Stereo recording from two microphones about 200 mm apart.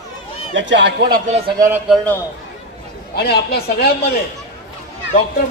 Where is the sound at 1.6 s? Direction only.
15° right (ahead or behind).